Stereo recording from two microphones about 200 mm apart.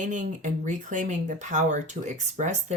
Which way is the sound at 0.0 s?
40° right (ahead or behind).